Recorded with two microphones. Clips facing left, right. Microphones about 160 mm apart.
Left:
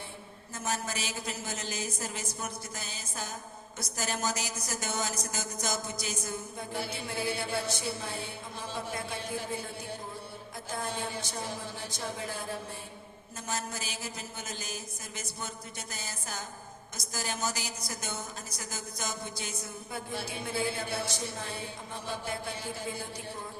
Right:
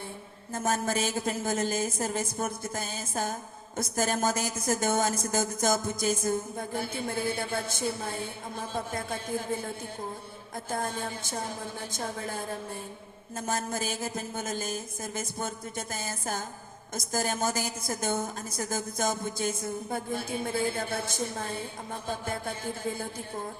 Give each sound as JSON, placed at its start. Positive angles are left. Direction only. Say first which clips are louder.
{"t": 0.5, "sound": "speech", "louder": "right 7 dB", "side_deg": -50}